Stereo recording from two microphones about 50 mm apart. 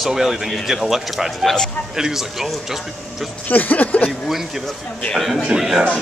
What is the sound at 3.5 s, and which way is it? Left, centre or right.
Speech, left.